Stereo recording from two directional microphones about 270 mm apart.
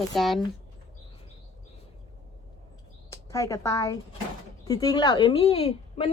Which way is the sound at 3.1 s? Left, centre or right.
Centre.